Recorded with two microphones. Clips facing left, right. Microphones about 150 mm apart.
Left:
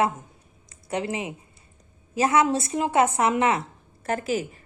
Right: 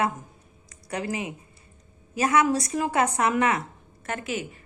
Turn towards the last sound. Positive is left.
turn(degrees=35)  # may be behind; listen again after turning